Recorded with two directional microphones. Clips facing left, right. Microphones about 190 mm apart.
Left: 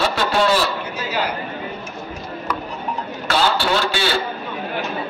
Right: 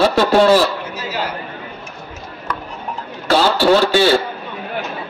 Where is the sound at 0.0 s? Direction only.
45° right (ahead or behind).